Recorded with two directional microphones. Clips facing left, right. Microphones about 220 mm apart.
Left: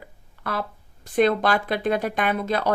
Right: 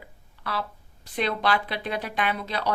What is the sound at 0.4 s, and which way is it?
Speech, 50° left (ahead or behind).